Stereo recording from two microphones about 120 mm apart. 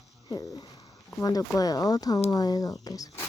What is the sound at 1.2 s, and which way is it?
Speech, 30° left (ahead or behind).